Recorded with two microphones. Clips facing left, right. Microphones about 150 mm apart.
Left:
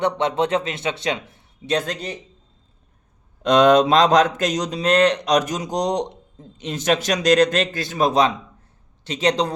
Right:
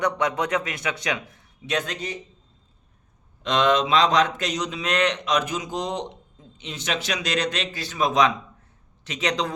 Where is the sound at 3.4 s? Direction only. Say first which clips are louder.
Left 7 dB; 45° left (ahead or behind).